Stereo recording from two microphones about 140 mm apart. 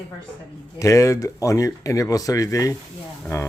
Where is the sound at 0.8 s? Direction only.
20° left (ahead or behind).